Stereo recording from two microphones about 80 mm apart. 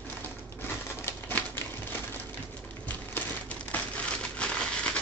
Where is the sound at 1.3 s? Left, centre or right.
Left.